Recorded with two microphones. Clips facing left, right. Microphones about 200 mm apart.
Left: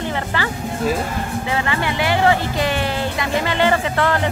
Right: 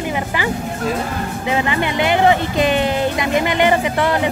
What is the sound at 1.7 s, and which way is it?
Speech, 20° right (ahead or behind).